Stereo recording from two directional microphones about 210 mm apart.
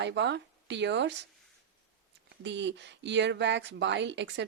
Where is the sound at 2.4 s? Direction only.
55° right (ahead or behind).